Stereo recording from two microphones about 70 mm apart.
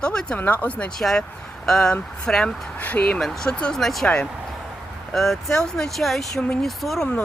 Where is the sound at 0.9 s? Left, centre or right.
Centre.